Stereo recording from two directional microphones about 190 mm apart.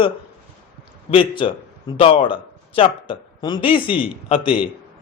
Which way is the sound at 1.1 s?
25° left (ahead or behind).